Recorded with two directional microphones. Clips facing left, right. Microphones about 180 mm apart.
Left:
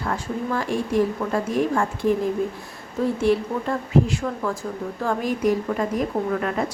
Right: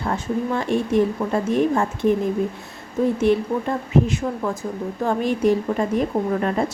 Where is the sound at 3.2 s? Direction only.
20° right (ahead or behind).